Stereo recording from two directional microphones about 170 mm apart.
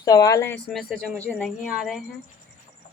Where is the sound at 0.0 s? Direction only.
20° left (ahead or behind).